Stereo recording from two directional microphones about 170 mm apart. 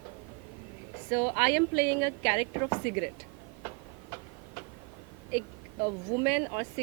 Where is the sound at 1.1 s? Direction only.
15° right (ahead or behind).